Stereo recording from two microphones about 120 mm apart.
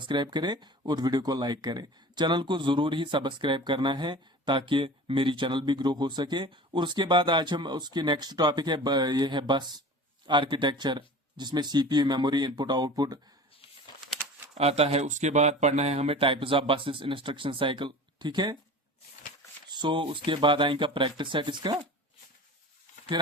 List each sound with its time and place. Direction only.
0.0 s speech: 40° right (ahead or behind)
14.5 s speech: 60° right (ahead or behind); by 18.5 s 40° right (ahead or behind)
19.7 s speech: 40° right (ahead or behind)
23.2 s speech: 40° right (ahead or behind)